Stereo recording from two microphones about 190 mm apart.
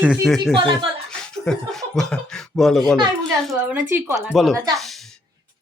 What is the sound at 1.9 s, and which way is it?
Speech, 5° left (ahead or behind).